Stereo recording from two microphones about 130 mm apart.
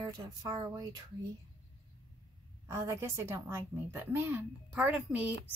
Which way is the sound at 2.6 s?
25° right (ahead or behind).